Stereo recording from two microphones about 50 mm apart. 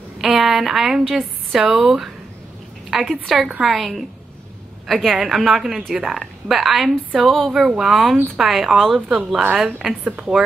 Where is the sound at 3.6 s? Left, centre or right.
Centre.